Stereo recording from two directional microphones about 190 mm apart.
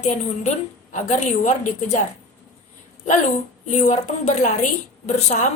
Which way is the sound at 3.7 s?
35° left (ahead or behind).